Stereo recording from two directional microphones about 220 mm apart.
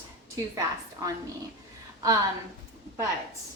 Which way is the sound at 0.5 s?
15° right (ahead or behind).